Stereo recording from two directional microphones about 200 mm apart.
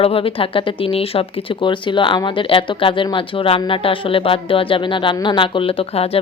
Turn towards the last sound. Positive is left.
turn(degrees=30)  # may be behind; listen again after turning